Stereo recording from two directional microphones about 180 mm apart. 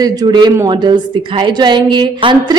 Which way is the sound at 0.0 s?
20° right (ahead or behind).